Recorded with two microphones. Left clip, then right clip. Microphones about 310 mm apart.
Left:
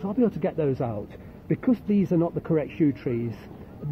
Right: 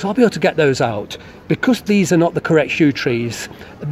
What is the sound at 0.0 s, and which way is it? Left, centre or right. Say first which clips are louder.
Speech: right 11 dB; right.